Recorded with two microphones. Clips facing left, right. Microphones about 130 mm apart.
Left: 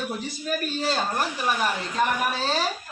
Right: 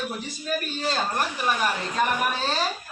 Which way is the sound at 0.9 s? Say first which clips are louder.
Right 2 dB; 5° left (ahead or behind).